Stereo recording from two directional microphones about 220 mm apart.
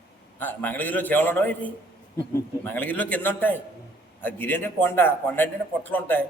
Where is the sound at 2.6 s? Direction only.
10° left (ahead or behind).